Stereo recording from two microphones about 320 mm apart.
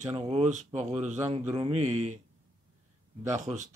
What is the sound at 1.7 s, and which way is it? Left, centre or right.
Speech, right.